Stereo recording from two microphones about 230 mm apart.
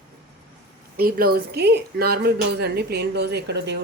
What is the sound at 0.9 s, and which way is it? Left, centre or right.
Speech, right.